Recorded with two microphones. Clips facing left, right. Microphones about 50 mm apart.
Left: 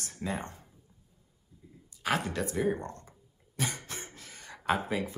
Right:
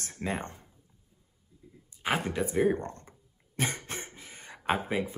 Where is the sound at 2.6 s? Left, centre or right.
Right.